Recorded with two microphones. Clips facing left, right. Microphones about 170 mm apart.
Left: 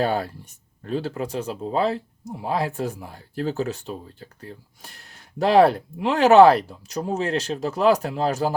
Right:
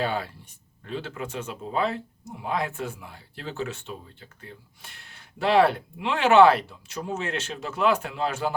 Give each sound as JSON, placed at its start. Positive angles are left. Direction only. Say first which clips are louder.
{"t": 0.0, "sound": "speech", "louder": "left 5 dB", "side_deg": 40}